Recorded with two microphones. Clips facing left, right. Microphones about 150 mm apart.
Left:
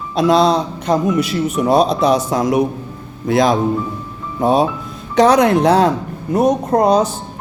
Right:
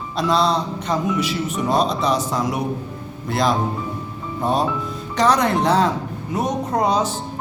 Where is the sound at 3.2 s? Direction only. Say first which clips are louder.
Left 6 dB; 90° left.